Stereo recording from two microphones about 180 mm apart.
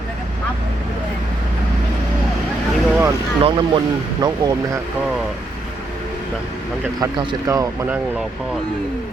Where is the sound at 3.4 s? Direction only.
25° right (ahead or behind).